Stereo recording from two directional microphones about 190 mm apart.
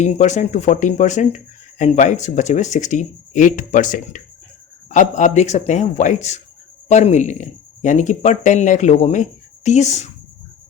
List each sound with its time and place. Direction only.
0.0 s speech: 40° left (ahead or behind)